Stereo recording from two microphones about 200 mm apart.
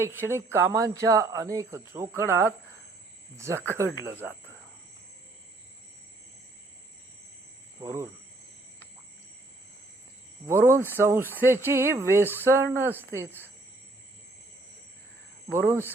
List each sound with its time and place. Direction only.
0.0 s speech: 10° right (ahead or behind)
7.8 s speech: 15° right (ahead or behind)
10.4 s speech: 15° right (ahead or behind)
15.5 s speech: 15° right (ahead or behind)